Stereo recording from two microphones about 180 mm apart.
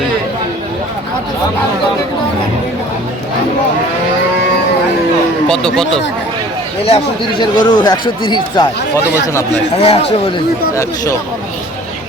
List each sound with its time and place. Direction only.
5.5 s speech: 5° left (ahead or behind)
6.8 s speech: 30° left (ahead or behind)
9.8 s speech: 35° left (ahead or behind)